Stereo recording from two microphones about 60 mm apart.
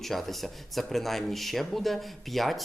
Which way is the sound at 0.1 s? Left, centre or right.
Centre.